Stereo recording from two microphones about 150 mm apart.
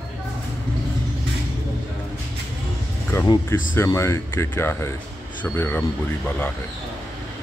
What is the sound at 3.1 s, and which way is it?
Music, 20° left (ahead or behind).